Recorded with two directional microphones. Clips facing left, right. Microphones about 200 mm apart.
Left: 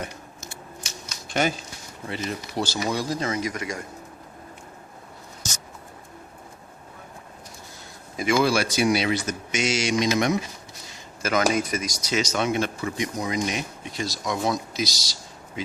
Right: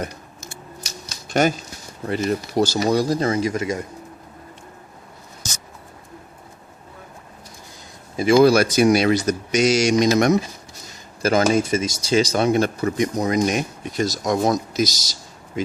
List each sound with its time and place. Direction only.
0.5 s scissors: 40° right (ahead or behind)
2.0 s speech: 45° right (ahead or behind); by 3.8 s 25° right (ahead or behind)
8.1 s speech: 35° right (ahead or behind)
10.8 s a sound: 35° right (ahead or behind)
11.5 s speech: 25° right (ahead or behind); by 15.6 s 45° right (ahead or behind)